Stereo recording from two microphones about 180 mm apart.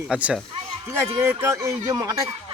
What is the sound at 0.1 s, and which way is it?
Speech, 5° right (ahead or behind).